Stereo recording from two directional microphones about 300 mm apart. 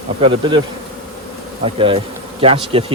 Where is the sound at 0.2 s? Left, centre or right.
Centre.